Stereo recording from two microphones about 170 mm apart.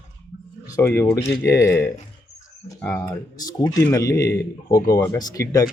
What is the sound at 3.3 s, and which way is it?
Speech, 20° left (ahead or behind).